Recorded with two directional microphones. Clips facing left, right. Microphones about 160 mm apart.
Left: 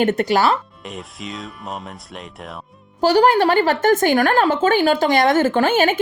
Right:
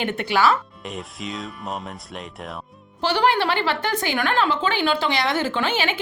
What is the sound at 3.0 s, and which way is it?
A woman's voice, 40° left (ahead or behind).